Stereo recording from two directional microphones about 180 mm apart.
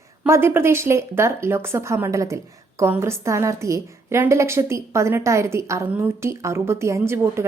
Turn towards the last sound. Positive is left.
turn(degrees=-15)  # may be behind; listen again after turning